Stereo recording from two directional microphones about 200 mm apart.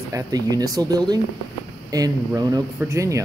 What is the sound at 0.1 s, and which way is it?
Speech, 20° right (ahead or behind).